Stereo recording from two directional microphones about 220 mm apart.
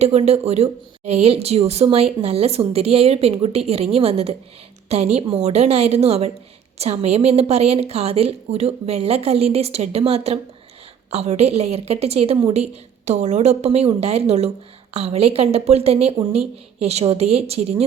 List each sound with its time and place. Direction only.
0.0 s a woman's voice: 30° right (ahead or behind)